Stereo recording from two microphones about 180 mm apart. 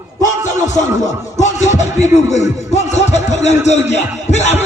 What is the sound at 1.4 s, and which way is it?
Music, 40° left (ahead or behind).